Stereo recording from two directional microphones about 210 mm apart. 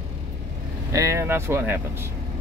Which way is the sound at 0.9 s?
15° right (ahead or behind).